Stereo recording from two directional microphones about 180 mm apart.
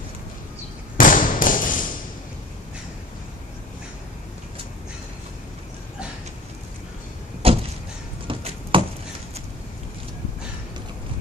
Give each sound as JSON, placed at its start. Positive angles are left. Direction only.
{"t": 0.9, "sound": "a sound", "side_deg": 50}
{"t": 7.4, "sound": "vehicle", "side_deg": -35}
{"t": 8.3, "sound": "chop", "side_deg": -30}
{"t": 8.7, "sound": "chopping", "side_deg": -30}